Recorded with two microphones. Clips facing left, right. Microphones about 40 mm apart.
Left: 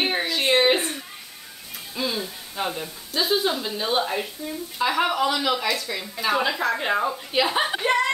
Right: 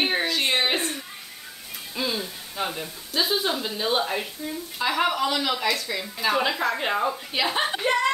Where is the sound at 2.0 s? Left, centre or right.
Centre.